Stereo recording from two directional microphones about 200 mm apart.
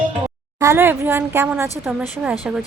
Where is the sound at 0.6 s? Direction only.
15° right (ahead or behind).